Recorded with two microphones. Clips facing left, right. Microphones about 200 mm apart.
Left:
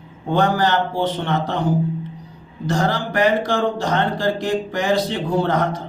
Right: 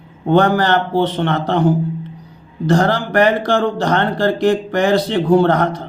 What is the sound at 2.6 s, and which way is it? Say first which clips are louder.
Speech: right 6 dB; 65° right (ahead or behind).